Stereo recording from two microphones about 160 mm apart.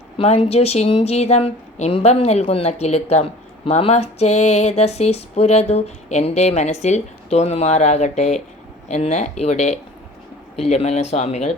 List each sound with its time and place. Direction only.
0.2 s a woman's voice: 40° left (ahead or behind)